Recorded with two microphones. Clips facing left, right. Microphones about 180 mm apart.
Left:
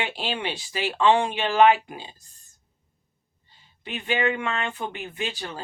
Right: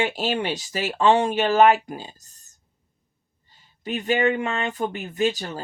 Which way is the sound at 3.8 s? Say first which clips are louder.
Right 4 dB; 40° right (ahead or behind).